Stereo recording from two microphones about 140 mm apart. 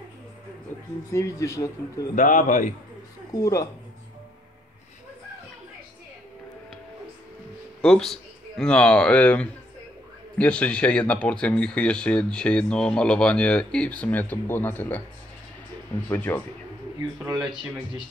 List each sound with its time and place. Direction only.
1.1 s speech: 20° left (ahead or behind)
2.1 s a man's voice: 70° left (ahead or behind)
7.8 s speech: 5° left (ahead or behind)
16.1 s speech: 15° left (ahead or behind)
17.3 s speech: 30° right (ahead or behind)